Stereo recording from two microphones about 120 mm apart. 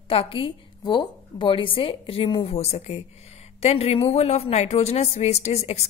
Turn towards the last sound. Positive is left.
turn(degrees=65)  # may be behind; listen again after turning